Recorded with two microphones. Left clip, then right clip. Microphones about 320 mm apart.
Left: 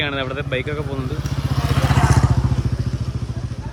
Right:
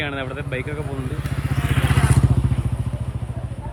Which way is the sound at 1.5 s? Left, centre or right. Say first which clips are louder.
Left 3 dB; left.